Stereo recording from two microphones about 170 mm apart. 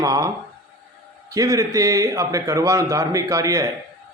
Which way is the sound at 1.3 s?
20° right (ahead or behind).